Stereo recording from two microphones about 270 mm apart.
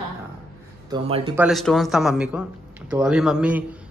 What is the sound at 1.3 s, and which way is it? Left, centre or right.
Speech, centre.